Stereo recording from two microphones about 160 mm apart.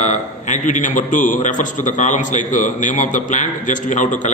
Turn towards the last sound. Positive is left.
turn(degrees=50)  # may be behind; listen again after turning